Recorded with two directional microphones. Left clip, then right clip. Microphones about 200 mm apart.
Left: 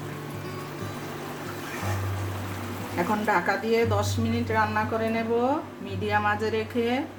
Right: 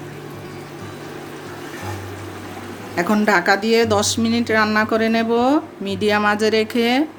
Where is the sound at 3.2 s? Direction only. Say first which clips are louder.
Right 10 dB; 50° right (ahead or behind).